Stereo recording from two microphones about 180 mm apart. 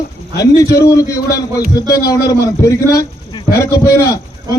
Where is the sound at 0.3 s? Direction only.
20° left (ahead or behind).